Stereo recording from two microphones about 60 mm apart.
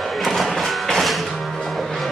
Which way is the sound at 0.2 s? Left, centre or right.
Centre.